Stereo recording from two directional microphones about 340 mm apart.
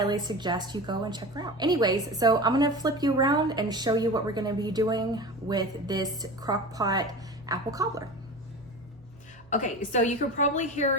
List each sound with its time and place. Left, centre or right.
0.0 s a woman's voice: centre
9.5 s a woman's voice: left